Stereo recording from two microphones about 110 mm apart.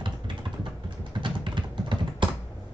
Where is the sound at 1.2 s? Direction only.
45° right (ahead or behind).